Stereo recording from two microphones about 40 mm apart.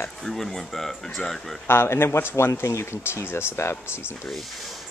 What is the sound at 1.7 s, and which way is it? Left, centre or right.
Speech, left.